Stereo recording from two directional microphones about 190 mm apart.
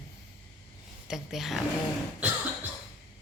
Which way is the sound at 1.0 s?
Centre (ahead or behind).